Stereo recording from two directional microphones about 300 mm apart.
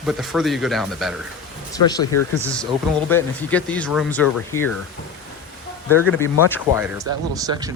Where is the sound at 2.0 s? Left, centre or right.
Left.